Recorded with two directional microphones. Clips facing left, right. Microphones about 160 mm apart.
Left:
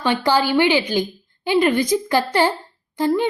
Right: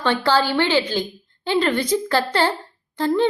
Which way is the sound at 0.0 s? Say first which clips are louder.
Left 1 dB; 15° left (ahead or behind).